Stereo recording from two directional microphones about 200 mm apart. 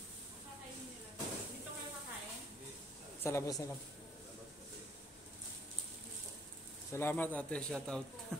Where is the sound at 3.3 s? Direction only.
15° left (ahead or behind).